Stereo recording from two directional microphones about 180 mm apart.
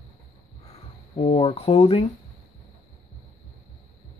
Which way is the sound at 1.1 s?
30° left (ahead or behind).